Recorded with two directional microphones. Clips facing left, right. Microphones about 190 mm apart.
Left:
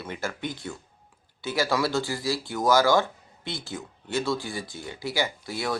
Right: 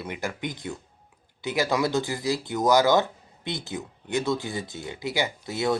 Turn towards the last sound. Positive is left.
turn(degrees=-20)  # may be behind; listen again after turning